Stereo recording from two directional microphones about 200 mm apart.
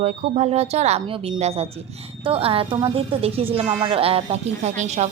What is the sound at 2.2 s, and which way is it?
A woman's voice, 30° right (ahead or behind).